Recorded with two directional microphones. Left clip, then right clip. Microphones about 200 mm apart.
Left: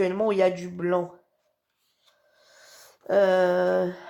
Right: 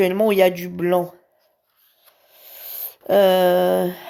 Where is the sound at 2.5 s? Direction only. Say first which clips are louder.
Right 9 dB; 45° right (ahead or behind).